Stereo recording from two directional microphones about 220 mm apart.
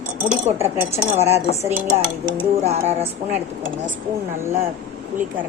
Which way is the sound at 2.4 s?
30° right (ahead or behind).